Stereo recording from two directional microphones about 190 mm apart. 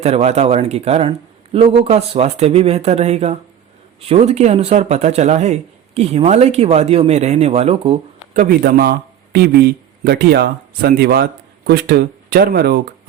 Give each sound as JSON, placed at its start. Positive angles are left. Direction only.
{"t": 0.0, "sound": "speech", "side_deg": -35}